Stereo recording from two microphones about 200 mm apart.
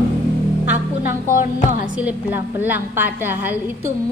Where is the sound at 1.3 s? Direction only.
40° left (ahead or behind).